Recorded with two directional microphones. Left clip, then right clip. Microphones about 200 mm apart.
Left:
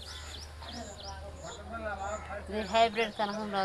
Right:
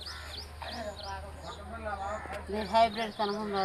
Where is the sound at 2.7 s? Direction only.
15° left (ahead or behind).